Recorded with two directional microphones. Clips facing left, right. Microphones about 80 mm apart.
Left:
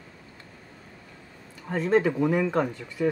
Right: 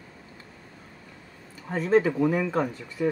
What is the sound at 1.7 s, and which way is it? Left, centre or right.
Speech, centre.